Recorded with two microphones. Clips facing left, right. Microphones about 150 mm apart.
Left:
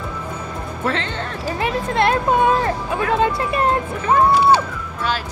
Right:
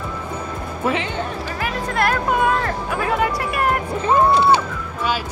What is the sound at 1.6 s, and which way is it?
Speech, 25° left (ahead or behind).